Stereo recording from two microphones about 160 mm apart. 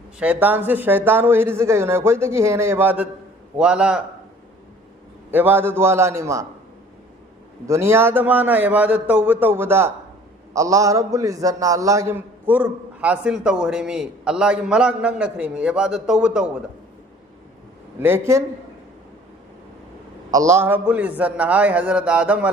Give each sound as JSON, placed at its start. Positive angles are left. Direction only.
{"t": 0.2, "sound": "a man's voice", "side_deg": -10}
{"t": 5.3, "sound": "a man's voice", "side_deg": -10}
{"t": 7.7, "sound": "a man's voice", "side_deg": -15}
{"t": 18.0, "sound": "a man's voice", "side_deg": -15}
{"t": 20.3, "sound": "a man's voice", "side_deg": -20}